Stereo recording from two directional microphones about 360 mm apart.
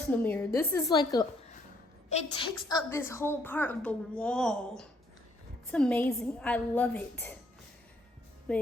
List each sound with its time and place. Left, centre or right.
0.1 s a woman's voice: centre
8.5 s a woman's voice: centre